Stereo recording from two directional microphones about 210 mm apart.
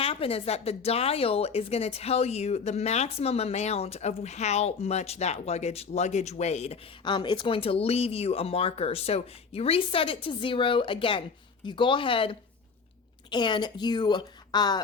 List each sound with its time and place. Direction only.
0.0 s a woman's voice: 25° left (ahead or behind)